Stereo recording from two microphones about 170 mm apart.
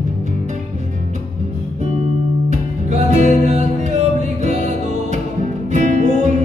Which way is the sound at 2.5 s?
45° right (ahead or behind).